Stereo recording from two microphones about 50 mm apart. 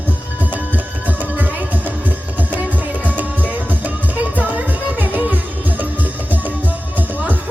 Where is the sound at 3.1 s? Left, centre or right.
Right.